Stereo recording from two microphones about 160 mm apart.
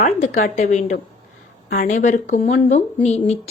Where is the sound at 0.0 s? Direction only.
60° left (ahead or behind).